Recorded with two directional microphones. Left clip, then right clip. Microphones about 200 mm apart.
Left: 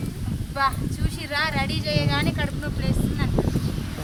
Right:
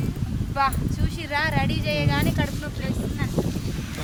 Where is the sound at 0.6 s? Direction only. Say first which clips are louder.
Even; 15° left (ahead or behind).